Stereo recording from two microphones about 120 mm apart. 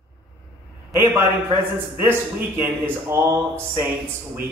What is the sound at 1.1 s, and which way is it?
A man's voice, 20° right (ahead or behind).